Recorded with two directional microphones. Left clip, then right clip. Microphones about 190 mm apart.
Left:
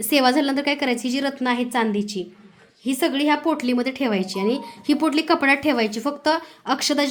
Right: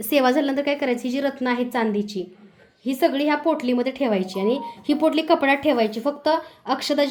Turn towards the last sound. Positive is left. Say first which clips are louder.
# left 1 dB
turn(degrees=35)  # may be behind; listen again after turning